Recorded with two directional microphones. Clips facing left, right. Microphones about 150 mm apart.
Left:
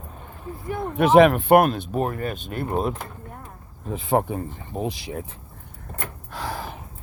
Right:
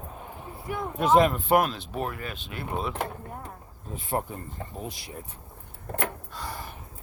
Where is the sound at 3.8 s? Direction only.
90° left.